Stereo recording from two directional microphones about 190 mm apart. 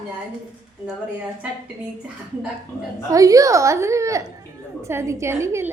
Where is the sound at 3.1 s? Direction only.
15° right (ahead or behind).